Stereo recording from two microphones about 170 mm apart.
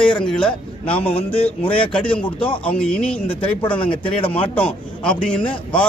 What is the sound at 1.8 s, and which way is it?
Speech, 5° left (ahead or behind).